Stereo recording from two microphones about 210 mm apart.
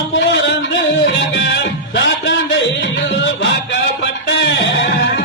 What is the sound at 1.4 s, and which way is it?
Music, 55° left (ahead or behind).